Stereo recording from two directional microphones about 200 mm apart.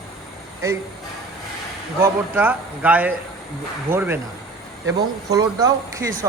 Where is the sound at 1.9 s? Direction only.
10° right (ahead or behind).